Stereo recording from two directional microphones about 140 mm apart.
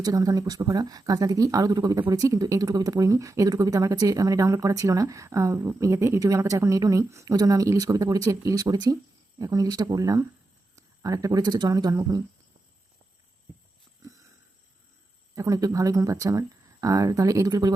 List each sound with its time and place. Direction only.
0.0 s speech: 25° right (ahead or behind)
15.4 s speech: 25° right (ahead or behind)